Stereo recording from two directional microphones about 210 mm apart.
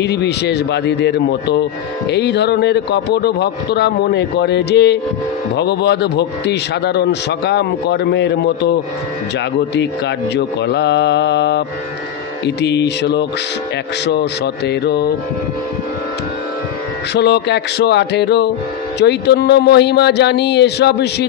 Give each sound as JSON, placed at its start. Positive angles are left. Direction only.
{"t": 0.0, "sound": "a man's voice", "side_deg": 55}
{"t": 9.8, "sound": "mantra", "side_deg": 55}
{"t": 12.4, "sound": "a man's voice", "side_deg": 55}
{"t": 17.1, "sound": "a man's voice", "side_deg": 55}